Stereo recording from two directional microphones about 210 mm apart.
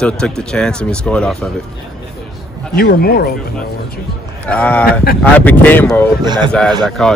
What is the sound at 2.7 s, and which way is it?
Speech, 45° left (ahead or behind).